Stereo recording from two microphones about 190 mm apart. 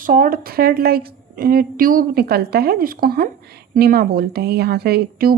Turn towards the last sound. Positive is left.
turn(degrees=-55)  # may be behind; listen again after turning